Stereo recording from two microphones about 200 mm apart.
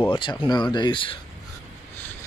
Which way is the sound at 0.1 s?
25° left (ahead or behind).